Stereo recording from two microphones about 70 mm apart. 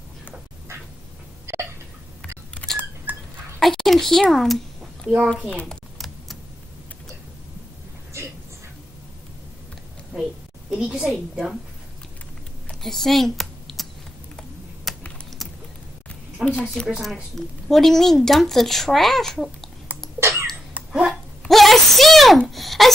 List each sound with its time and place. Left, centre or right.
2.6 s camera: centre
3.1 s a sound: right
3.5 s a child's voice: centre
5.1 s a child's voice: centre
5.5 s speech: centre
5.9 s typewriter: centre
10.7 s a woman's voice: centre
12.8 s typing: centre
14.9 s typing: centre
16.4 s a sound: centre
16.8 s a woman's voice: centre
20.2 s cough: right
20.9 s a sound: centre